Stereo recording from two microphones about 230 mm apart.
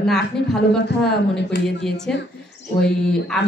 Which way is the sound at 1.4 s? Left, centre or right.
Left.